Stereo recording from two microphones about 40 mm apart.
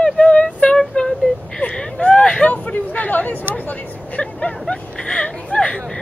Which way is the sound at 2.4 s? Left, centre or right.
Left.